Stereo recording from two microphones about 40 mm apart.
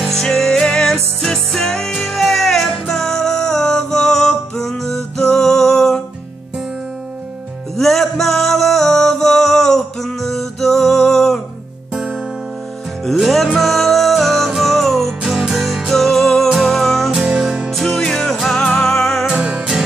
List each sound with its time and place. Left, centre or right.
0.0 s music: centre
7.7 s music: centre
13.0 s music: centre
15.2 s music: centre
15.5 s music: centre
17.4 s music: right
17.6 s music: centre
19.3 s music: right